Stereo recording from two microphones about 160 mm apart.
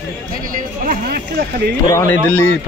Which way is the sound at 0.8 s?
70° right (ahead or behind).